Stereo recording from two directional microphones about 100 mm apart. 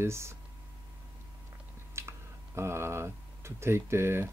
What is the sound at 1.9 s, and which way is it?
Speech, 25° right (ahead or behind).